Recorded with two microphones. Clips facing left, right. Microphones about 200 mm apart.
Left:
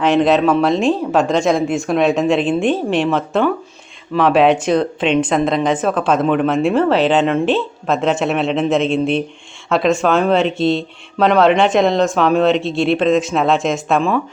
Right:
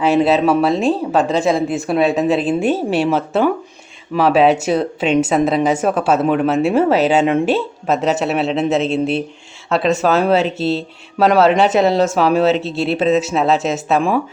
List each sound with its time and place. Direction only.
0.0 s speech: 5° right (ahead or behind)
8.9 s speech: 40° right (ahead or behind)
9.6 s speech: centre (ahead or behind)